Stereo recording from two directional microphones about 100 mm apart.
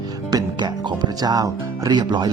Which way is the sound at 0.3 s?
45° right (ahead or behind).